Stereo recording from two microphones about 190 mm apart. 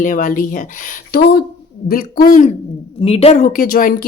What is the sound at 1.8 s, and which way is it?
Speech, 50° left (ahead or behind).